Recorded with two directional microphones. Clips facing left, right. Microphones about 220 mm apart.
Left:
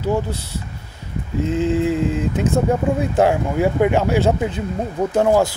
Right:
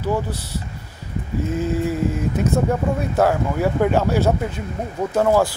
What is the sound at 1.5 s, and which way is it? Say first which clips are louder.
Speech: left 4 dB; 20° left (ahead or behind).